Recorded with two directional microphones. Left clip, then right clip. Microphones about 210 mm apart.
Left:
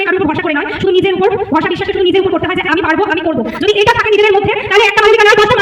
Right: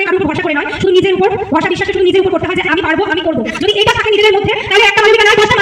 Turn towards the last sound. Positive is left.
turn(degrees=-20)  # may be behind; listen again after turning